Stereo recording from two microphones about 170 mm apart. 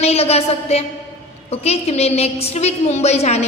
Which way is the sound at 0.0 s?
35° left (ahead or behind).